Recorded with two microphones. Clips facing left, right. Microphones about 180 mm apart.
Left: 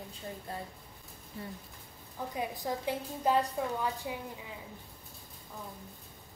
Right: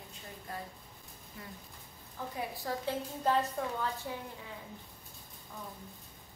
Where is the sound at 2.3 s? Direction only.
15° left (ahead or behind).